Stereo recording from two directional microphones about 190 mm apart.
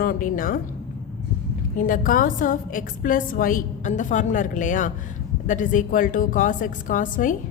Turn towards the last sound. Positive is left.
turn(degrees=45)  # may be behind; listen again after turning